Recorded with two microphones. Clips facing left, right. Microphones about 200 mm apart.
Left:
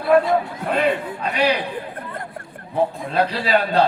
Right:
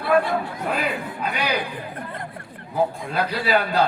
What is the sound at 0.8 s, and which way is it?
Speech, 30° left (ahead or behind).